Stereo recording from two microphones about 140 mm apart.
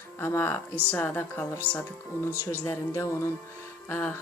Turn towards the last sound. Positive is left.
turn(degrees=15)  # may be behind; listen again after turning